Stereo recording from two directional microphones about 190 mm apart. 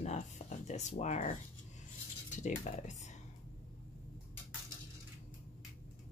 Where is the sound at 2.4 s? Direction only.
40° left (ahead or behind).